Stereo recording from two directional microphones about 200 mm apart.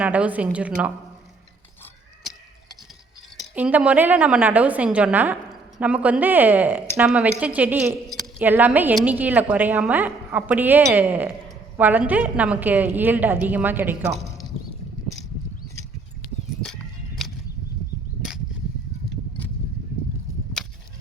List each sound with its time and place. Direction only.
0.0 s a woman's voice: 10° right (ahead or behind)
3.5 s a woman's voice: 5° right (ahead or behind)
16.6 s a sound: centre (ahead or behind)
18.2 s cap gun: 5° right (ahead or behind)